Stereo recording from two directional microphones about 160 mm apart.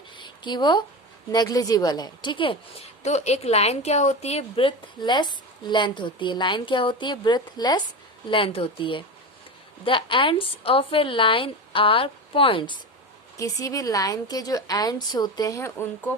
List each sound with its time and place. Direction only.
0.2 s a sound: 30° left (ahead or behind)
1.3 s a woman's voice: 25° left (ahead or behind)
13.3 s a woman's voice: 20° left (ahead or behind)